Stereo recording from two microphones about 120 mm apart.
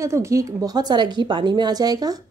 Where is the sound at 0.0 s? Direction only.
25° right (ahead or behind).